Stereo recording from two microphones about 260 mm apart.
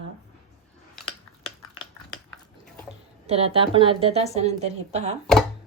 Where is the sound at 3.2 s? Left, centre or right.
Right.